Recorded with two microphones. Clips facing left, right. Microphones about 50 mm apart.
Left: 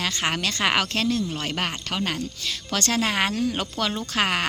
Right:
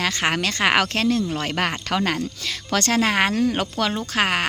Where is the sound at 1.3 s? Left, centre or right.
Right.